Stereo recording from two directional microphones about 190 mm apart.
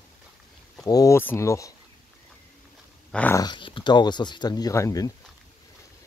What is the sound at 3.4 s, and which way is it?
Speech, 25° left (ahead or behind).